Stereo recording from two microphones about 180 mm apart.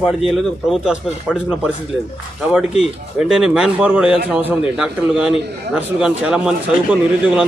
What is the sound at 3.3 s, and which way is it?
Speech, 5° right (ahead or behind).